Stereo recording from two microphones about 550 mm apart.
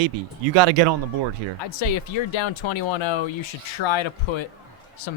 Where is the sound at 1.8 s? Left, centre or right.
Left.